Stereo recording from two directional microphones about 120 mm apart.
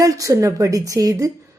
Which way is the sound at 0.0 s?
30° right (ahead or behind).